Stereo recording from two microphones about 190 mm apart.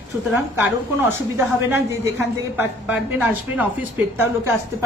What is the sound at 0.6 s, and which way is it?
A woman's voice, 15° right (ahead or behind).